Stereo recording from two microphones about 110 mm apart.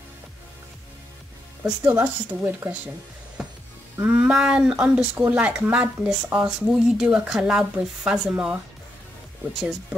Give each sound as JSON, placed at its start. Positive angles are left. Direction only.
{"t": 1.6, "sound": "speech", "side_deg": -15}
{"t": 3.4, "sound": "music", "side_deg": -5}
{"t": 3.9, "sound": "speech", "side_deg": -15}